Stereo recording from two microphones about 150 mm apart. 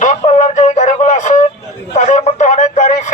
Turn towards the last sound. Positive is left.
turn(degrees=50)  # may be behind; listen again after turning